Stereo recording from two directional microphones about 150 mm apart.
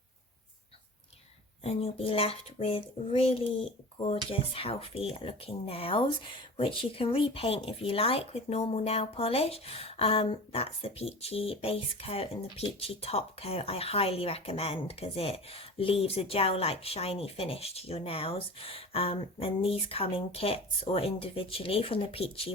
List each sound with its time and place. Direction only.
1.6 s speech: 40° left (ahead or behind)